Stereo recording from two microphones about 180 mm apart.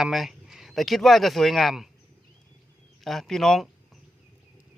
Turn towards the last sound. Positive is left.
turn(degrees=0)  # may be behind; listen again after turning